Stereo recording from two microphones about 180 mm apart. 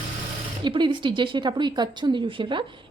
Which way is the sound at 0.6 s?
25° right (ahead or behind).